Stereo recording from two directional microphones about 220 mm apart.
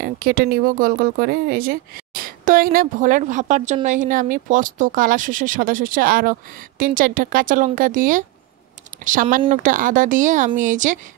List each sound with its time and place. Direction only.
0.0 s speech: 40° right (ahead or behind)